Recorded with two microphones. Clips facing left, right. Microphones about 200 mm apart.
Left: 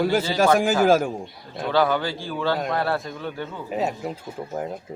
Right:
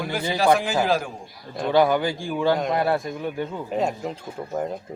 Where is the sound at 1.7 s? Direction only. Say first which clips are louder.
Right 2 dB; 15° right (ahead or behind).